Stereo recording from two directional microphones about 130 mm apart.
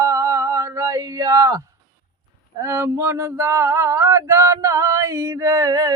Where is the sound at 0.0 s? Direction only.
25° right (ahead or behind).